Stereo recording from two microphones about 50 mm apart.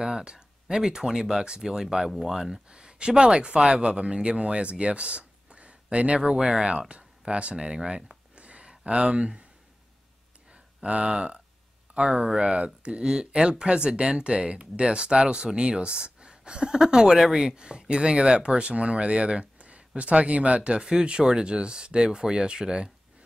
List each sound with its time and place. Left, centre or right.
0.0 s speech: centre
10.8 s speech: right